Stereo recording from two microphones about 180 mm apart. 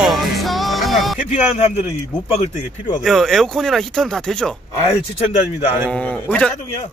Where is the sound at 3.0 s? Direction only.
Centre (ahead or behind).